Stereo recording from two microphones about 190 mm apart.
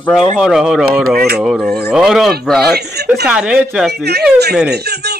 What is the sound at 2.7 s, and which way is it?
Speech, 60° right (ahead or behind).